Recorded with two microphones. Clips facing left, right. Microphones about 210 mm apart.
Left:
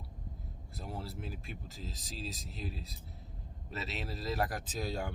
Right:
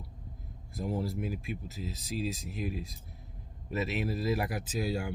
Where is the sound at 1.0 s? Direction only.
15° right (ahead or behind).